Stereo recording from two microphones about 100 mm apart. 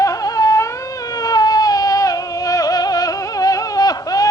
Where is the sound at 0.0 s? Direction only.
35° left (ahead or behind).